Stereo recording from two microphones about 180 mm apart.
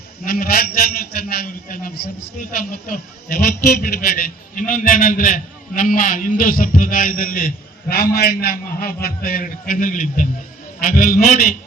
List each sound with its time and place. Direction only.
0.3 s a man's voice: 55° left (ahead or behind)